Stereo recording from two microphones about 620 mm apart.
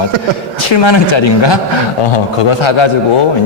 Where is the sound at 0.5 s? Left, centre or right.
Left.